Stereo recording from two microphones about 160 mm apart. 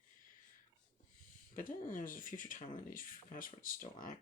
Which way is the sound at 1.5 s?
60° left (ahead or behind).